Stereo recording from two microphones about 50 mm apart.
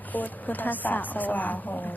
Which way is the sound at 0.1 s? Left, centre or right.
Left.